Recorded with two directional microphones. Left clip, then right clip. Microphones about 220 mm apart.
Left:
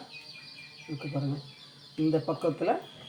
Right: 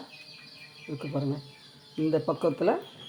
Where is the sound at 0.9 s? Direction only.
40° right (ahead or behind).